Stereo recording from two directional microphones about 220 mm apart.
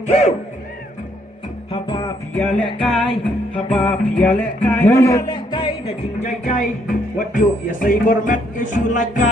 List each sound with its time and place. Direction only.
0.1 s speech: 30° left (ahead or behind)
1.7 s music: 25° left (ahead or behind)
2.4 s music: 5° left (ahead or behind); by 5.7 s 20° left (ahead or behind)
6.1 s speech: 35° left (ahead or behind)